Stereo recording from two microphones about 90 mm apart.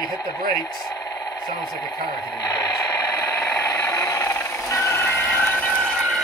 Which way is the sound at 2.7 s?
40° left (ahead or behind).